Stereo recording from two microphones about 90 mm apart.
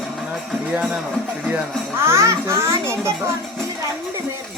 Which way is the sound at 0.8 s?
15° right (ahead or behind).